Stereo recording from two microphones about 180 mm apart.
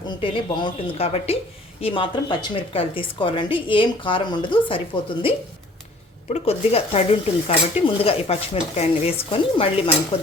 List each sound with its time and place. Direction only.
0.2 s a woman's voice: 30° left (ahead or behind)
6.3 s speech: 35° left (ahead or behind)